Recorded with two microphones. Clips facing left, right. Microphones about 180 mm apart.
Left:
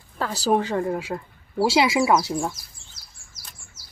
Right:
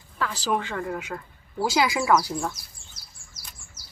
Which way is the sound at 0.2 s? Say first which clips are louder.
Left 5 dB; 40° left (ahead or behind).